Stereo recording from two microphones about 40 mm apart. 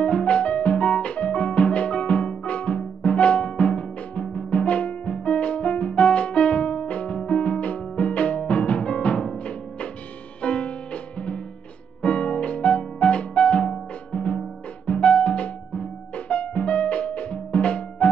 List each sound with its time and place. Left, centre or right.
0.0 s music: left